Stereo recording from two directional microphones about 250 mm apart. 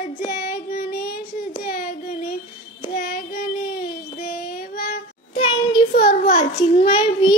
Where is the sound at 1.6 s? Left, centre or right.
Left.